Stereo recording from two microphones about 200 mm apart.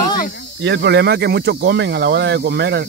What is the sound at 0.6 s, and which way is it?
Speech, 60° right (ahead or behind).